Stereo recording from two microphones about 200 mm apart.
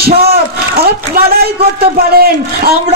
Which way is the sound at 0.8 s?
50° right (ahead or behind).